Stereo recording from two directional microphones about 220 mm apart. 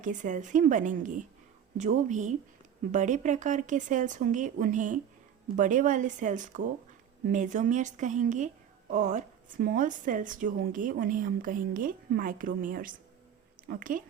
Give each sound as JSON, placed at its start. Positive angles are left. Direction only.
{"t": 0.0, "sound": "a woman's voice", "side_deg": -35}